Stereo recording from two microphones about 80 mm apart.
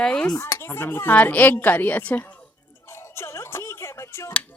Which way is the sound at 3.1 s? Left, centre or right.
Left.